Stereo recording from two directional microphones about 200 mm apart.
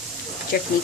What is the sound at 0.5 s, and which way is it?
Speech, 45° left (ahead or behind).